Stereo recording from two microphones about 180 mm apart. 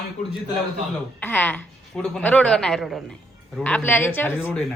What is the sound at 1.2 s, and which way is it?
A woman's voice, 10° left (ahead or behind).